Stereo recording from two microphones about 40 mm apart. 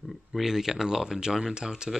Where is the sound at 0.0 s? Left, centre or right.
Centre.